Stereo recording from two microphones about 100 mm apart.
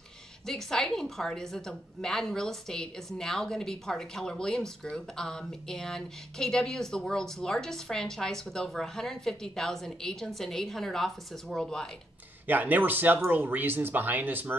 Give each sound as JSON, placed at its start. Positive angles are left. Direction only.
{"t": 0.5, "sound": "a woman's voice", "side_deg": 5}
{"t": 12.4, "sound": "speech", "side_deg": -20}